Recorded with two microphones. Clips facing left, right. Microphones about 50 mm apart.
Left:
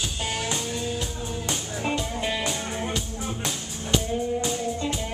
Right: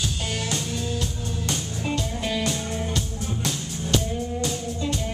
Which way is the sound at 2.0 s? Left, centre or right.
Centre.